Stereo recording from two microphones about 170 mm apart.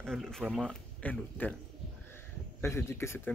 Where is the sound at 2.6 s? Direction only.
15° left (ahead or behind).